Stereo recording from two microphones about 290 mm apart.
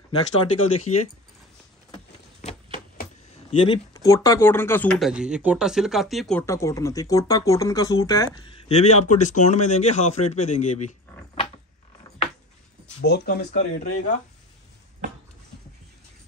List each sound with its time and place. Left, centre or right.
0.4 s speech: left
3.5 s speech: centre
13.0 s speech: left